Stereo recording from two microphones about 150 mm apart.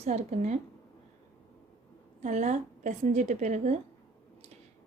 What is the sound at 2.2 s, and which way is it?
A woman's voice, 55° right (ahead or behind).